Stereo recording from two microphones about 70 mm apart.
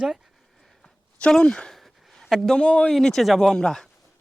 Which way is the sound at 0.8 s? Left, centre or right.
Centre.